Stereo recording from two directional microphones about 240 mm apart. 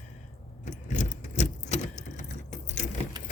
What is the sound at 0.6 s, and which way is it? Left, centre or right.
Keys jangling, left.